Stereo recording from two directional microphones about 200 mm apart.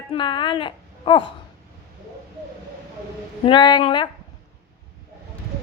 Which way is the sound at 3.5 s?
25° left (ahead or behind).